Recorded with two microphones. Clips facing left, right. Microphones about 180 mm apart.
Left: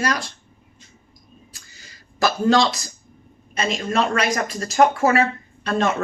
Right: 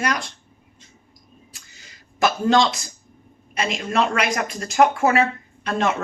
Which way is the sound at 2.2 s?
35° left (ahead or behind).